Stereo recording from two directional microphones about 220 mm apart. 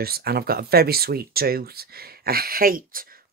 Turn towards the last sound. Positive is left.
turn(degrees=-40)  # may be behind; listen again after turning